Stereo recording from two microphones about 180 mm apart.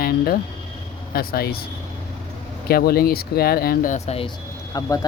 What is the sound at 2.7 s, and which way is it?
Speech, 55° left (ahead or behind).